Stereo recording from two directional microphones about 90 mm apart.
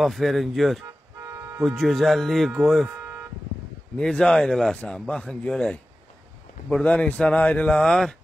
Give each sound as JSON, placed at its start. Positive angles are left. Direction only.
{"t": 0.0, "sound": "speech", "side_deg": 0}
{"t": 1.2, "sound": "toot", "side_deg": -35}
{"t": 1.6, "sound": "speech", "side_deg": 0}
{"t": 3.0, "sound": "vehicle", "side_deg": -15}
{"t": 3.9, "sound": "a man's voice", "side_deg": 10}
{"t": 6.8, "sound": "a man's voice", "side_deg": 15}